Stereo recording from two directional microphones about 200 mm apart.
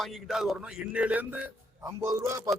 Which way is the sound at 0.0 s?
Centre (ahead or behind).